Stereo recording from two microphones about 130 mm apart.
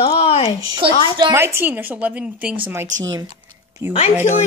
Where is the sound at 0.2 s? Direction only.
50° left (ahead or behind).